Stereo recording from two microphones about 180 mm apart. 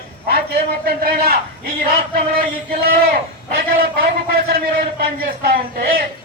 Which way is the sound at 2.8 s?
55° right (ahead or behind).